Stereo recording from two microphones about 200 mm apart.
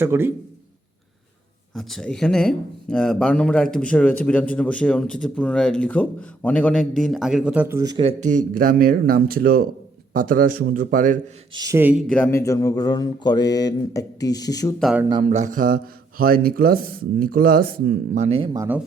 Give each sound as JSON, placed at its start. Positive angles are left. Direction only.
{"t": 0.0, "sound": "a man's voice", "side_deg": -10}
{"t": 1.7, "sound": "speech", "side_deg": 0}
{"t": 8.2, "sound": "speech", "side_deg": -40}
{"t": 11.5, "sound": "a man's voice", "side_deg": -15}
{"t": 12.0, "sound": "speech", "side_deg": 5}
{"t": 12.5, "sound": "speech", "side_deg": 15}
{"t": 14.8, "sound": "speech", "side_deg": 0}
{"t": 15.0, "sound": "speech", "side_deg": -20}
{"t": 15.3, "sound": "speech", "side_deg": -35}
{"t": 18.2, "sound": "speech", "side_deg": -30}